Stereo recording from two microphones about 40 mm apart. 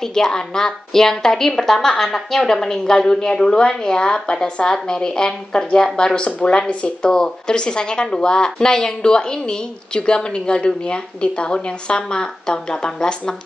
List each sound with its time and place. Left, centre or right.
0.1 s a woman's voice: centre